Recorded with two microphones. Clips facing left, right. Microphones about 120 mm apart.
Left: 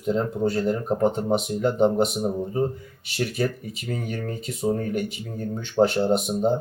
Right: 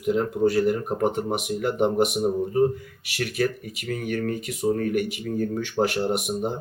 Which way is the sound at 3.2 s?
25° left (ahead or behind).